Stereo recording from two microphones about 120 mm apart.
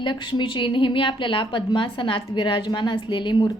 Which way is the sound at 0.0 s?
40° left (ahead or behind).